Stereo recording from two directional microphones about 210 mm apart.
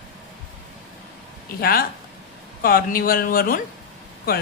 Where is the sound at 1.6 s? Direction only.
45° left (ahead or behind).